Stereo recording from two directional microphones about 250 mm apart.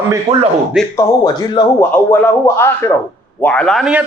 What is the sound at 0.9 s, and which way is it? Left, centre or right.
A man's voice, centre.